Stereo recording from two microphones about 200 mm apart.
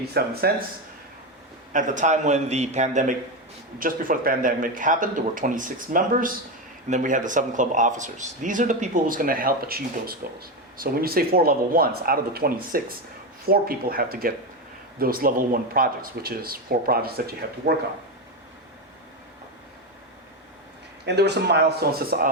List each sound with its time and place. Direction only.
0.1 s speech: 50° right (ahead or behind)
1.7 s speech: 40° right (ahead or behind)
21.0 s speech: 55° right (ahead or behind)